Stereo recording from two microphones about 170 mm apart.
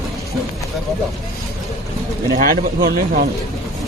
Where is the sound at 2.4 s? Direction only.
55° right (ahead or behind).